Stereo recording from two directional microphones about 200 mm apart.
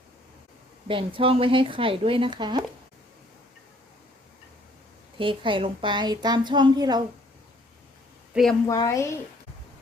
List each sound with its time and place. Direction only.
0.9 s a woman's voice: 25° right (ahead or behind)
5.1 s a woman's voice: 25° right (ahead or behind)
8.3 s a woman's voice: centre (ahead or behind)
8.6 s a woman's voice: 15° left (ahead or behind)